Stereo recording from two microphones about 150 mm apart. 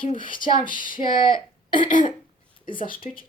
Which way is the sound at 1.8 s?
60° left (ahead or behind).